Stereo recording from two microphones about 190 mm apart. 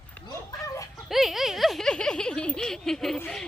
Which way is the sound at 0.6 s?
15° left (ahead or behind).